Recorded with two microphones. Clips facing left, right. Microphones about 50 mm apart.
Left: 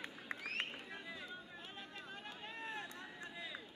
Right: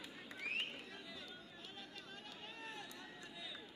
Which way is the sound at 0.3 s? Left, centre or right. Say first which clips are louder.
Left 5 dB; left.